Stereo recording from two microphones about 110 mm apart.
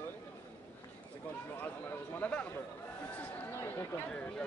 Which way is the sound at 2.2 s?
10° left (ahead or behind).